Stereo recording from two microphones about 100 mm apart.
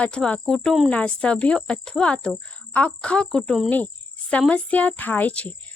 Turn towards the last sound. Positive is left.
turn(degrees=15)  # may be behind; listen again after turning